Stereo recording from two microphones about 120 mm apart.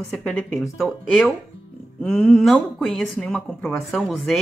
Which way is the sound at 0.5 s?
Centre (ahead or behind).